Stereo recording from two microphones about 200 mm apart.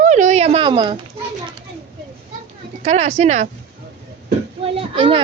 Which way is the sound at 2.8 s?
35° right (ahead or behind).